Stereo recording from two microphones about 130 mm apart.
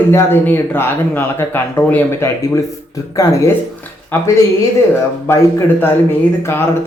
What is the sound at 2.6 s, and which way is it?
Speech, 25° left (ahead or behind).